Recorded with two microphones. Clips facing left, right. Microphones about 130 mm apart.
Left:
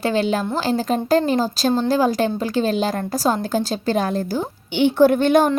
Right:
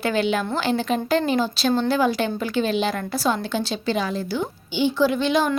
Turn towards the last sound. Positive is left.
turn(degrees=50)  # may be behind; listen again after turning